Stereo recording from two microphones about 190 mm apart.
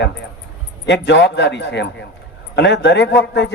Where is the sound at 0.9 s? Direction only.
65° left (ahead or behind).